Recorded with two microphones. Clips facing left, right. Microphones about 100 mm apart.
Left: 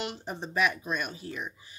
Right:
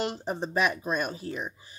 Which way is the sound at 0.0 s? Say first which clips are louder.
Right 5 dB; 35° right (ahead or behind).